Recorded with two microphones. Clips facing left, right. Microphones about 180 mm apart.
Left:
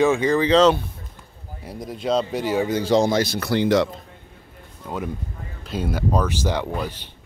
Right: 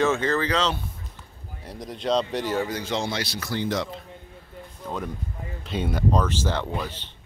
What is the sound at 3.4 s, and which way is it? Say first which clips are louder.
Speech: left 7 dB; 75° left (ahead or behind).